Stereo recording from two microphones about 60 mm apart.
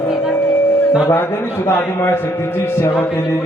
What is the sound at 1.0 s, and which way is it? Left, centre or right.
A man's voice, left.